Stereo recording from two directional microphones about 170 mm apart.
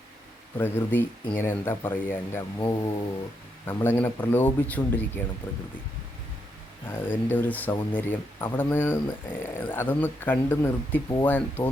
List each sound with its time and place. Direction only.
0.6 s speech: 10° left (ahead or behind)
2.6 s speech: 25° left (ahead or behind)
3.7 s speech: 15° left (ahead or behind)
6.8 s speech: 10° left (ahead or behind)